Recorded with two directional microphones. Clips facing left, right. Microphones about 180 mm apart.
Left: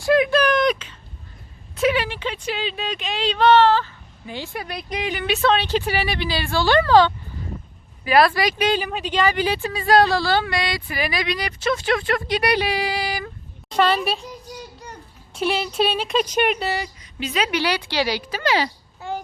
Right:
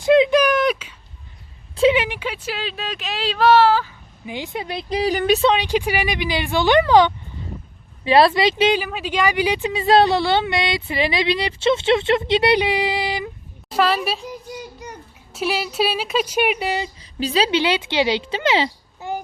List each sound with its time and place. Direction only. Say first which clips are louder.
0.0 s a sound: right 3 dB; 20° right (ahead or behind)
1.7 s speech: right 4 dB; 25° right (ahead or behind); by 5.4 s 40° right (ahead or behind)
5.4 s speech: right 2 dB; 15° right (ahead or behind)
8.7 s speech: right 1 dB; 5° right (ahead or behind)
13.7 s a woman's voice: even; 5° right (ahead or behind)
17.0 s a woman's voice: right 4 dB; 30° right (ahead or behind)